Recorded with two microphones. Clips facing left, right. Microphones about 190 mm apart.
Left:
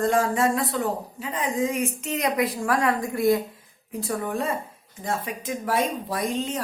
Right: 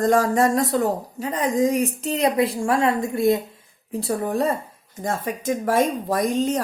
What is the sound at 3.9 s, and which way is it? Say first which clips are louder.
A woman's voice: right 4 dB; 35° right (ahead or behind).